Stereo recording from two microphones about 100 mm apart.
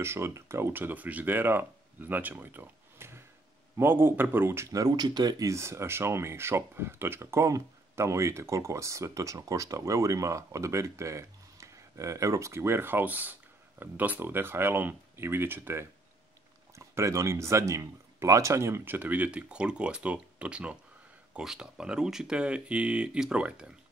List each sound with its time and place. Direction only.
0.0 s speech: 25° right (ahead or behind); by 5.5 s 45° right (ahead or behind)
5.5 s speech: 30° right (ahead or behind); by 23.7 s 10° right (ahead or behind)